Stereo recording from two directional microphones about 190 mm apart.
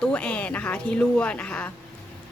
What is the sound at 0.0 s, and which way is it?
A woman's voice, 5° left (ahead or behind).